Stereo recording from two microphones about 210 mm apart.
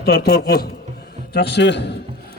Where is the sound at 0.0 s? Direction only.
50° left (ahead or behind).